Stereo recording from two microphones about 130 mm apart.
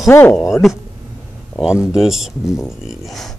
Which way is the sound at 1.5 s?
5° right (ahead or behind).